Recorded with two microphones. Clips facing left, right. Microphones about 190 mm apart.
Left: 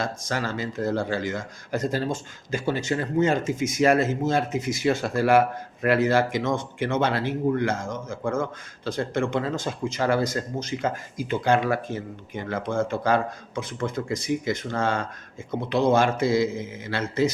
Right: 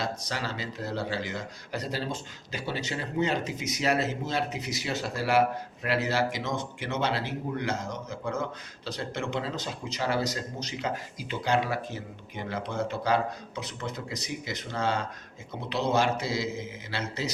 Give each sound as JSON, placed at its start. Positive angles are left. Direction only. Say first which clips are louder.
{"t": 0.0, "sound": "speech", "louder": "left 4 dB", "side_deg": 50}